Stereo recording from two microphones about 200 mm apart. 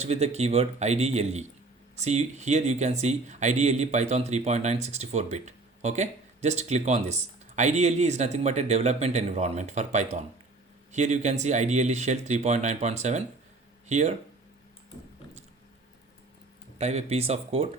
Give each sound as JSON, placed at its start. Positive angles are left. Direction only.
{"t": 0.0, "sound": "speech", "side_deg": -35}
{"t": 16.7, "sound": "speech", "side_deg": -30}